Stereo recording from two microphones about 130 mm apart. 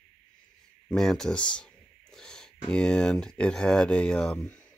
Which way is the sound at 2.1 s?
5° left (ahead or behind).